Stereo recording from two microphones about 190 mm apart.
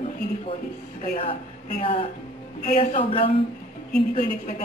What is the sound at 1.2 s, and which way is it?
A woman's voice, 30° left (ahead or behind).